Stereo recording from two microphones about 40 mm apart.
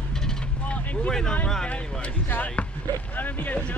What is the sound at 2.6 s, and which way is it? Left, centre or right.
Basketball bounce, left.